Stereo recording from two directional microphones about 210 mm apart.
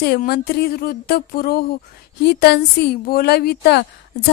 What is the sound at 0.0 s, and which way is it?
Speech, 50° left (ahead or behind).